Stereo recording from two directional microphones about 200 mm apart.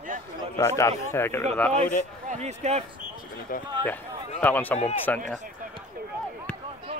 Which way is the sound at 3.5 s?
45° left (ahead or behind).